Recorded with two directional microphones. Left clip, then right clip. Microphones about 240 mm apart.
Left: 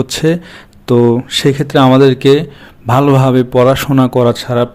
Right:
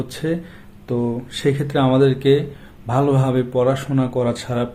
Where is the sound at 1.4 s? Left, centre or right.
Left.